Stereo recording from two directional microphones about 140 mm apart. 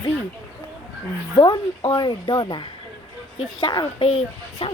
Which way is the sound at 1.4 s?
35° left (ahead or behind).